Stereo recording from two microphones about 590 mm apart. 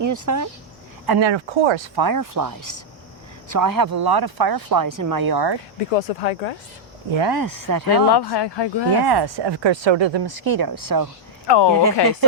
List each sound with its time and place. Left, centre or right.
0.0 s speech: right
1.0 s speech: right
2.0 s speech: right
5.9 s speech: left
7.1 s speech: right
8.1 s speech: left
8.9 s speech: right
11.4 s speech: left
11.7 s speech: right